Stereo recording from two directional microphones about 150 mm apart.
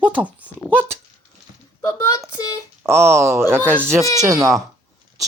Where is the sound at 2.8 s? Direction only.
20° right (ahead or behind).